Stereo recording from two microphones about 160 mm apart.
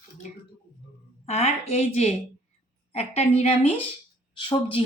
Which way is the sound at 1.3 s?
40° left (ahead or behind).